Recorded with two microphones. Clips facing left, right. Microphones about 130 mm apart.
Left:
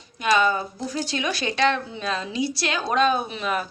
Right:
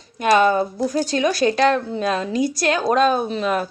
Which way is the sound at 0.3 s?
50° right (ahead or behind).